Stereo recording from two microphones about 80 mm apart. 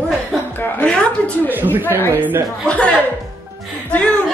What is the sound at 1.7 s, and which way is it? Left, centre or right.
Speech, right.